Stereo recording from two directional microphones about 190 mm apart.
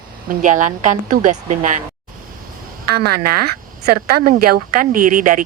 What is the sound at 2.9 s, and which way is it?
A woman's voice, 55° right (ahead or behind).